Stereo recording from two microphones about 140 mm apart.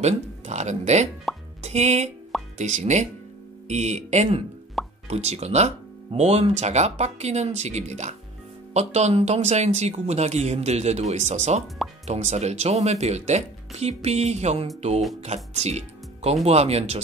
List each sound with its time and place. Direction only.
0.0 s speech: 55° right (ahead or behind)
1.3 s plop: centre (ahead or behind)
1.6 s speech: 50° right (ahead or behind)
4.8 s plop: centre (ahead or behind)
5.1 s speech: 50° right (ahead or behind)